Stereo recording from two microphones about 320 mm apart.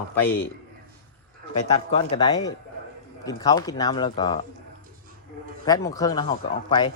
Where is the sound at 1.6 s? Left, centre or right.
Centre.